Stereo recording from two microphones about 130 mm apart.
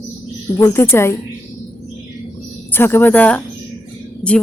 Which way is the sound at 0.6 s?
20° left (ahead or behind).